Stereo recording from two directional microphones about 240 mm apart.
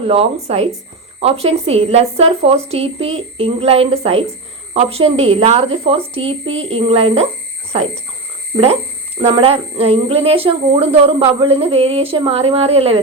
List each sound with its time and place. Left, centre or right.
0.0 s a woman's voice: right
6.5 s speech: right
6.7 s a woman's voice: right